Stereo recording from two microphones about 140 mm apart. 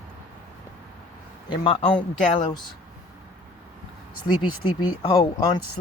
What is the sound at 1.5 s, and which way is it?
Speech, 40° left (ahead or behind).